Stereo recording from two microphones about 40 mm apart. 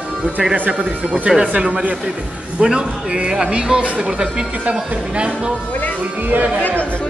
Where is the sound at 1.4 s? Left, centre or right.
Right.